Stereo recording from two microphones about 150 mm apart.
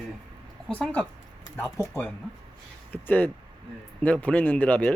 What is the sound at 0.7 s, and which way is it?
Speech, 10° left (ahead or behind).